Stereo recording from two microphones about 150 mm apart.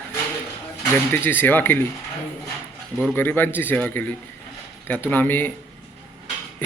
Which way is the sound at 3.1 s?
15° left (ahead or behind).